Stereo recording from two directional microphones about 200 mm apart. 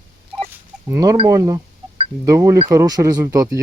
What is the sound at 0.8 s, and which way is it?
Speech, 15° right (ahead or behind).